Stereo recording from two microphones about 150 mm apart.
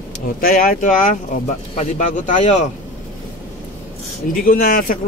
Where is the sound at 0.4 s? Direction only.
70° left (ahead or behind); by 2.6 s 55° left (ahead or behind).